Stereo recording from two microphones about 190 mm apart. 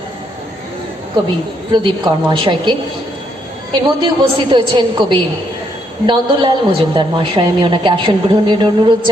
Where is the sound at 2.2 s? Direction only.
25° right (ahead or behind).